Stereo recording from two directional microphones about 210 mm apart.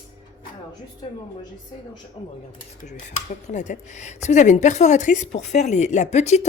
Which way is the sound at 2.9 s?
35° left (ahead or behind).